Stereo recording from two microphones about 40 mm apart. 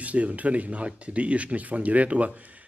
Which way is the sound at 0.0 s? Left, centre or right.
Right.